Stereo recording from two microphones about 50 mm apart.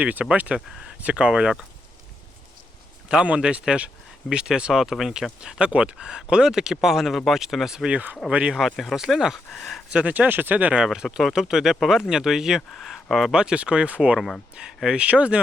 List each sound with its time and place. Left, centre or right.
0.0 s speech: right
3.2 s speech: right
4.7 s speech: centre
5.4 s speech: centre
8.3 s speech: right
8.7 s speech: centre
9.0 s speech: centre
9.5 s speech: centre
9.9 s speech: right
10.9 s speech: centre
13.3 s speech: centre
14.7 s speech: centre
14.9 s speech: right